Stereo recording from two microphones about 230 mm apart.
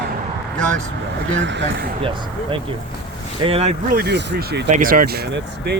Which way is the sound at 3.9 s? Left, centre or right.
Right.